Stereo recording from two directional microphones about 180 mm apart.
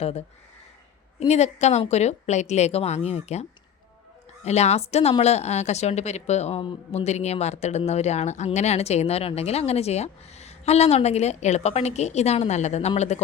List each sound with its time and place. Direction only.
0.0 s speech: 35° left (ahead or behind)
1.3 s speech: 40° left (ahead or behind)
4.4 s speech: 35° left (ahead or behind)